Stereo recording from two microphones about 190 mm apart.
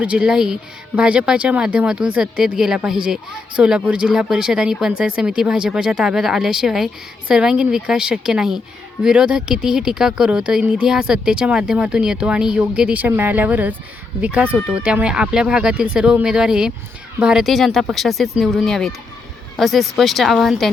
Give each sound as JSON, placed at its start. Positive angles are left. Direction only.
{"t": 0.0, "sound": "speech", "side_deg": -5}